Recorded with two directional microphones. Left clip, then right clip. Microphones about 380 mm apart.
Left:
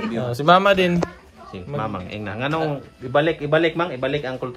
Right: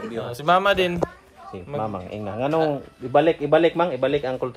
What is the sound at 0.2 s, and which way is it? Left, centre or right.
A man's voice, centre.